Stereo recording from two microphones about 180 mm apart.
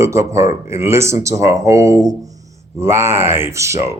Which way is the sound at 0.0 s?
15° right (ahead or behind).